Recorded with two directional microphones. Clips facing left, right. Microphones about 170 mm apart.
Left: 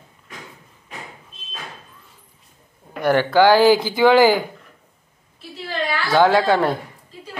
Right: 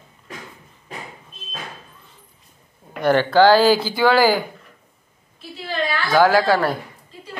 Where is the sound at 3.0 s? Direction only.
10° left (ahead or behind).